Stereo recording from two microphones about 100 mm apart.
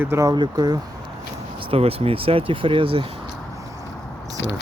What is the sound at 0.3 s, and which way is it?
Speech, 45° right (ahead or behind).